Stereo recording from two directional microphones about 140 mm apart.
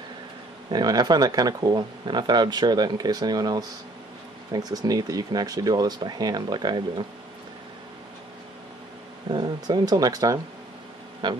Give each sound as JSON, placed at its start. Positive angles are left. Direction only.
{"t": 0.7, "sound": "speech", "side_deg": -30}
{"t": 9.3, "sound": "a man's voice", "side_deg": -30}